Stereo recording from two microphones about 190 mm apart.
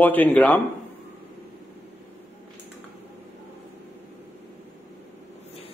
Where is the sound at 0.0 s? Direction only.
10° left (ahead or behind).